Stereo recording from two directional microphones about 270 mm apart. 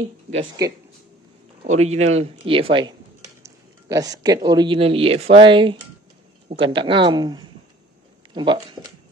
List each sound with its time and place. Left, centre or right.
0.3 s speech: centre